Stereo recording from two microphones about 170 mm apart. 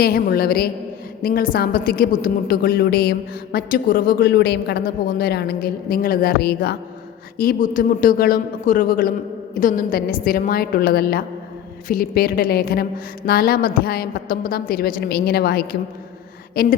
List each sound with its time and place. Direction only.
0.0 s a woman's voice: 65° left (ahead or behind)
7.3 s a woman's voice: 55° left (ahead or behind)